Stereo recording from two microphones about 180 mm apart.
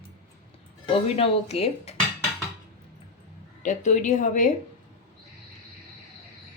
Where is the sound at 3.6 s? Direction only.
45° left (ahead or behind).